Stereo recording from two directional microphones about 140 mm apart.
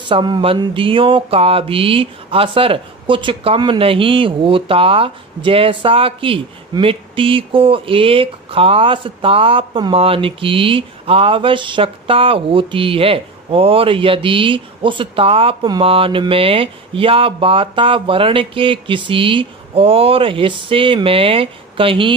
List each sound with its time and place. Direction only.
0.1 s mantra: 35° right (ahead or behind)